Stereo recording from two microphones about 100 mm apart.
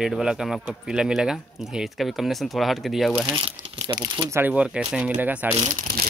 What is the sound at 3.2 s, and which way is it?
Speech, 60° right (ahead or behind).